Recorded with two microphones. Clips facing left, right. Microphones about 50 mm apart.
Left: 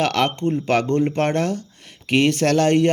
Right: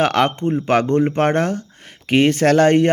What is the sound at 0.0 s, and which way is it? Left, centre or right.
Speech, right.